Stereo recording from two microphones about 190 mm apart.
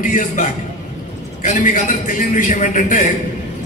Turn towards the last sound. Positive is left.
turn(degrees=40)  # may be behind; listen again after turning